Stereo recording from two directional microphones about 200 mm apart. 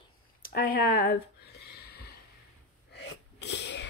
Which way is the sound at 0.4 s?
45° left (ahead or behind).